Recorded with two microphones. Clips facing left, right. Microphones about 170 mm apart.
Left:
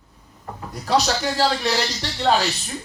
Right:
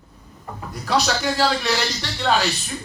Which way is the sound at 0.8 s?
40° left (ahead or behind).